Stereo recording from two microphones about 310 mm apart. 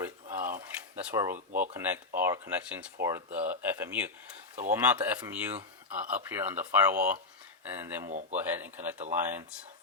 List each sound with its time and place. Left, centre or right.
0.0 s a sound: centre
0.9 s speech: centre
8.0 s speech: right
8.4 s speech: centre